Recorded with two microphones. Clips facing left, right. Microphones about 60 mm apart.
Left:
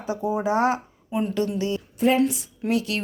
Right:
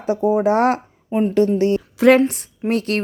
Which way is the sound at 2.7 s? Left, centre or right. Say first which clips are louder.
Right 4 dB; right.